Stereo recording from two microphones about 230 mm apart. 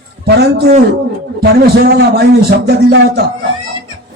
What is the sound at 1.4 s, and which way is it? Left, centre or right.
A man's voice, right.